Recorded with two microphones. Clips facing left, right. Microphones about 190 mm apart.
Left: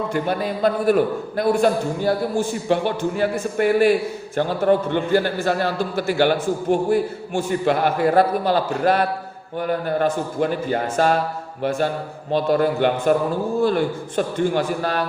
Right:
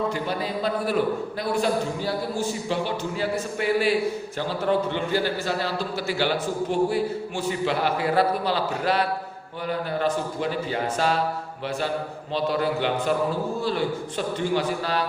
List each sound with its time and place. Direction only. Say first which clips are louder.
0.1 s a man's voice: left 5 dB; 55° left (ahead or behind)